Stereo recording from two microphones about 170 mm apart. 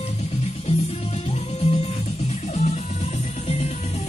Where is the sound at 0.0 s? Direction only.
40° left (ahead or behind).